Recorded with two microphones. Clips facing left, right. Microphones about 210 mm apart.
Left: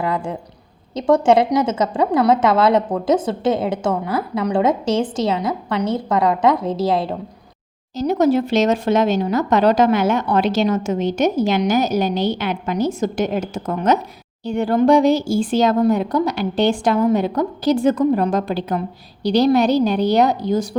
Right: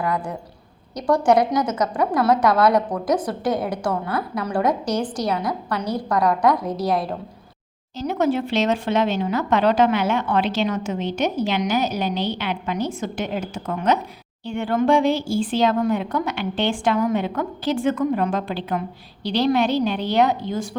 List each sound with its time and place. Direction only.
0.0 s a sound: 25° left (ahead or behind)
0.9 s a woman's voice: 25° left (ahead or behind)
7.9 s speech: 40° left (ahead or behind)